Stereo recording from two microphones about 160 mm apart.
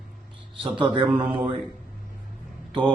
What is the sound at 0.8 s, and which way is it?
Speech, 30° right (ahead or behind).